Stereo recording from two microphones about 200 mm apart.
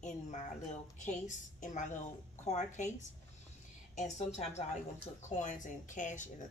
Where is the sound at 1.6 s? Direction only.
40° left (ahead or behind).